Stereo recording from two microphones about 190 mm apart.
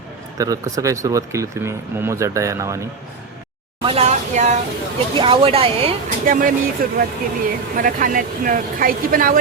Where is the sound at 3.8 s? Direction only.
30° right (ahead or behind).